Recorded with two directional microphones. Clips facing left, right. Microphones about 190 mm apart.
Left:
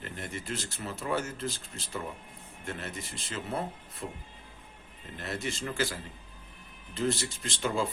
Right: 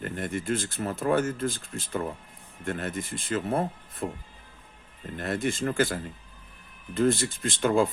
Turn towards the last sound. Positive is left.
turn(degrees=-55)  # may be behind; listen again after turning